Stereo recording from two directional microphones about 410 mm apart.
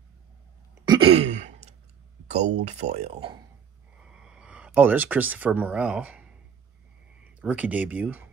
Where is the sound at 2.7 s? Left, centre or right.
Centre.